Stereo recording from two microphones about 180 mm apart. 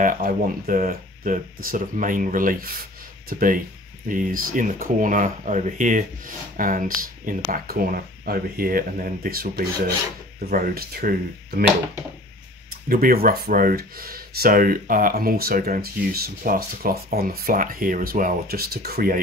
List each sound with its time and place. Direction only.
0.0 s speech: 50° right (ahead or behind)
10.5 s speech: 55° right (ahead or behind)
12.8 s speech: 50° right (ahead or behind)